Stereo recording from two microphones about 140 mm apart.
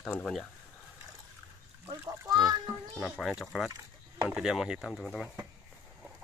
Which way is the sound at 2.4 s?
25° right (ahead or behind).